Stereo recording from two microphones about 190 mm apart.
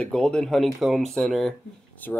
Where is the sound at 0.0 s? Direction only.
5° left (ahead or behind).